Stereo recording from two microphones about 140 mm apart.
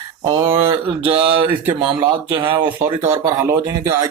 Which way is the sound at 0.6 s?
40° right (ahead or behind).